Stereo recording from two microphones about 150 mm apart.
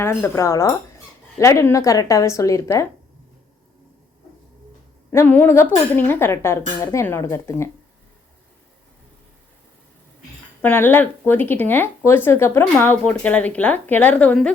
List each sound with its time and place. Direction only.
0.0 s a woman's voice: 15° left (ahead or behind)
5.1 s speech: 10° left (ahead or behind)
10.6 s speech: 15° left (ahead or behind)